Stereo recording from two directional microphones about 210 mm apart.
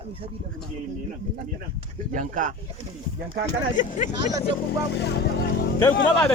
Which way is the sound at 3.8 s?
35° left (ahead or behind).